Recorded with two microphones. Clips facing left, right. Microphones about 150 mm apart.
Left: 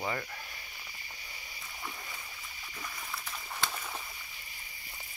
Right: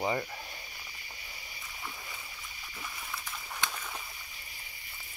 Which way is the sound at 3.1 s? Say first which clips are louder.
Even; 5° left (ahead or behind).